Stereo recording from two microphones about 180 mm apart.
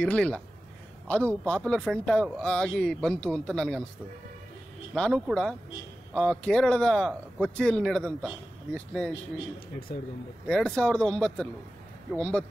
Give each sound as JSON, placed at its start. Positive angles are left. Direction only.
{"t": 0.0, "sound": "speech", "side_deg": 5}
{"t": 4.9, "sound": "speech", "side_deg": 5}
{"t": 9.9, "sound": "speech", "side_deg": 60}
{"t": 10.4, "sound": "speech", "side_deg": 5}